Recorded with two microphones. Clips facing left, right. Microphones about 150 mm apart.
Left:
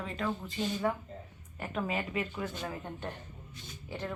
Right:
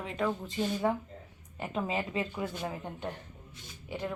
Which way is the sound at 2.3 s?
15° right (ahead or behind).